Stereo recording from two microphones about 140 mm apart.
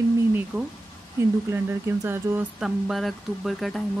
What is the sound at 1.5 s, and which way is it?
Speech, 15° right (ahead or behind).